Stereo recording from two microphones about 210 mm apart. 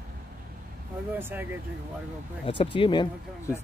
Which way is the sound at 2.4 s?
25° left (ahead or behind).